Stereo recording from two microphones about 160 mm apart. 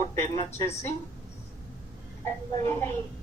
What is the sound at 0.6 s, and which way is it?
Speech, 15° left (ahead or behind).